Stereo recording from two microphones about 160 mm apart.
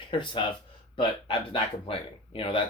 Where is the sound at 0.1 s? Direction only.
30° left (ahead or behind).